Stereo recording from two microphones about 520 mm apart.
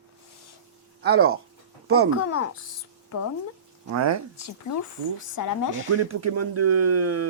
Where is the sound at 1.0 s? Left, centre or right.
Centre.